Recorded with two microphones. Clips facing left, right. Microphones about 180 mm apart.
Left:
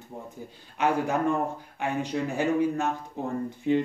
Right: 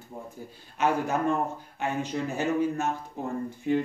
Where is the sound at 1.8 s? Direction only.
15° left (ahead or behind).